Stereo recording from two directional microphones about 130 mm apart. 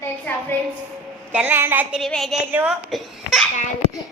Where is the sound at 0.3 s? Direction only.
15° left (ahead or behind).